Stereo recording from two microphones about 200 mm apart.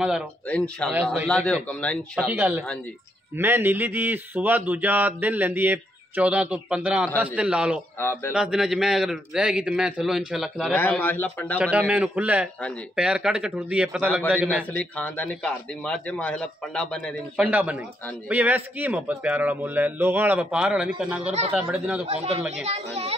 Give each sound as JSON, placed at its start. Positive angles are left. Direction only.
{"t": 0.0, "sound": "a man's voice", "side_deg": -5}
{"t": 2.2, "sound": "speech", "side_deg": -10}
{"t": 8.0, "sound": "a man's voice", "side_deg": 10}
{"t": 8.3, "sound": "a man's voice", "side_deg": -5}
{"t": 10.7, "sound": "a man's voice", "side_deg": 10}
{"t": 11.7, "sound": "a man's voice", "side_deg": -5}
{"t": 14.8, "sound": "a man's voice", "side_deg": 5}
{"t": 17.4, "sound": "speech", "side_deg": -5}
{"t": 22.0, "sound": "speech", "side_deg": -30}